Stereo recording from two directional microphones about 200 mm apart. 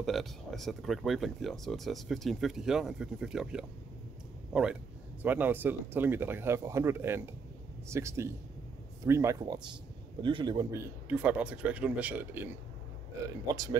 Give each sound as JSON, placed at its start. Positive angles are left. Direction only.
{"t": 0.0, "sound": "a man's voice", "side_deg": 0}
{"t": 11.1, "sound": "speech", "side_deg": -10}
{"t": 13.5, "sound": "a man's voice", "side_deg": -20}